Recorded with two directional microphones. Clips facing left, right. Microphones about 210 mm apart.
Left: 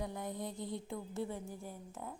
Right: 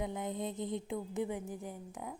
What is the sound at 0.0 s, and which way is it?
Music, 20° right (ahead or behind).